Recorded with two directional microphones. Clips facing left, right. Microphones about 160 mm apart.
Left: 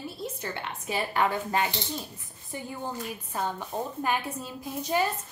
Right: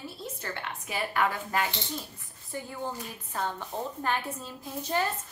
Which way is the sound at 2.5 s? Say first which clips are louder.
Left 1 dB; 15° left (ahead or behind).